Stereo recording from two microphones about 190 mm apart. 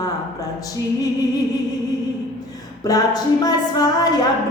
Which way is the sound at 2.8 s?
20° left (ahead or behind).